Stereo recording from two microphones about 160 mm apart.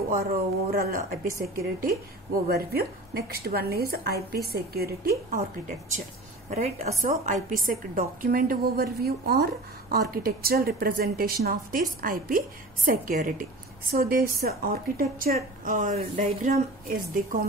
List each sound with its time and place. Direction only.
0.1 s speech: 65° right (ahead or behind)
5.3 s speech: 55° right (ahead or behind)
6.5 s a woman's voice: 45° right (ahead or behind); by 15.3 s 65° right (ahead or behind)
15.6 s a woman's voice: 55° right (ahead or behind)
17.1 s speech: 60° right (ahead or behind)